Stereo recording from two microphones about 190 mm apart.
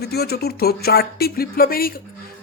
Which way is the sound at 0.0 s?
55° left (ahead or behind).